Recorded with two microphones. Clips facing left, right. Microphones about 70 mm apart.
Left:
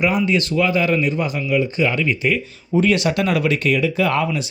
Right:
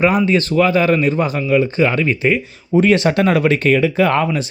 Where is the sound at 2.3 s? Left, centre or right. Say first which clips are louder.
Right 4 dB; right.